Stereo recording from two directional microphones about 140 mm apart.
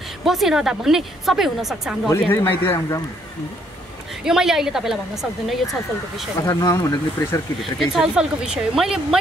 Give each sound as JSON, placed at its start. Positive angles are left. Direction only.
{"t": 0.2, "sound": "a woman's voice", "side_deg": 0}
{"t": 2.3, "sound": "speech", "side_deg": 15}
{"t": 4.2, "sound": "a woman's voice", "side_deg": -5}
{"t": 6.4, "sound": "speech", "side_deg": 25}
{"t": 7.6, "sound": "a woman's voice", "side_deg": 0}